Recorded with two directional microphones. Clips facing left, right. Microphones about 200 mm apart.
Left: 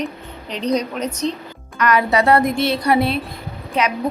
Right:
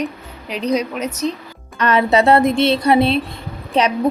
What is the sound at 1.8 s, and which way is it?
A woman's voice, 25° right (ahead or behind).